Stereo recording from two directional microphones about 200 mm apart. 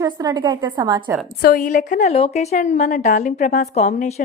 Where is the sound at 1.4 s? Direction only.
45° left (ahead or behind).